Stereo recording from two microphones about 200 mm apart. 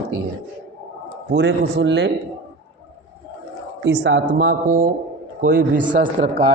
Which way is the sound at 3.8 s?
60° right (ahead or behind).